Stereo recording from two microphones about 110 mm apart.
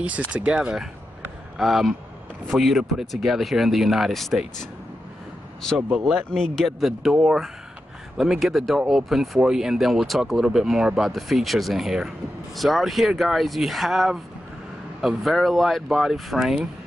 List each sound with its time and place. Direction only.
0.3 s speech: 10° right (ahead or behind)
5.8 s speech: 15° right (ahead or behind)
6.3 s speech: centre (ahead or behind)